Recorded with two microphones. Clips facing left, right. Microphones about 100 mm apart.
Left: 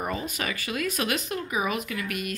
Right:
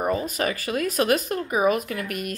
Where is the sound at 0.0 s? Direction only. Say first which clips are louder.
Right 6 dB; 40° right (ahead or behind).